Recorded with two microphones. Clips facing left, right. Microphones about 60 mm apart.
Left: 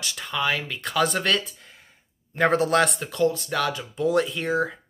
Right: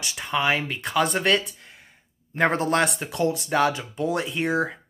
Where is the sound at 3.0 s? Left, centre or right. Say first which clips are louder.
Left 1 dB; centre.